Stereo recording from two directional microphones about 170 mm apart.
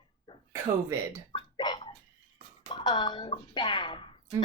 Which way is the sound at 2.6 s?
25° left (ahead or behind).